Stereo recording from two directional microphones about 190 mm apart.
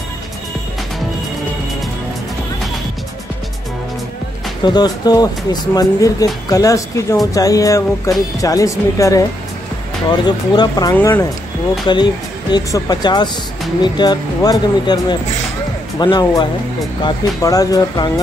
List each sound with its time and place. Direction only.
4.6 s speech: 20° left (ahead or behind)
10.2 s speech: 20° left (ahead or behind)